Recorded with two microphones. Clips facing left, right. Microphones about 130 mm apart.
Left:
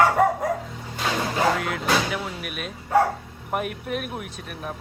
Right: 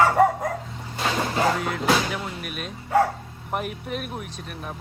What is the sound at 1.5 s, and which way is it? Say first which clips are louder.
Music: right 1 dB; centre (ahead or behind).